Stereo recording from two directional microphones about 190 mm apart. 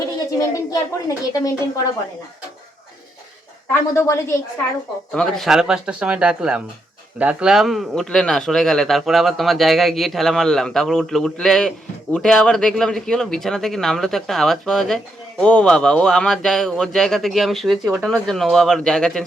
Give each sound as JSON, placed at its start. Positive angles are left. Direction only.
{"t": 0.3, "sound": "speech", "side_deg": 20}
{"t": 3.7, "sound": "speech", "side_deg": 15}
{"t": 5.1, "sound": "speech", "side_deg": 5}